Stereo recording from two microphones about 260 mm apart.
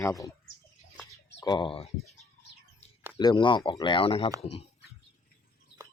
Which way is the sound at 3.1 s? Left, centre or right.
Centre.